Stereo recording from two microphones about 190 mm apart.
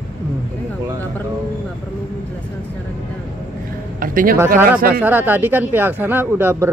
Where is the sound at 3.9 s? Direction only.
50° right (ahead or behind).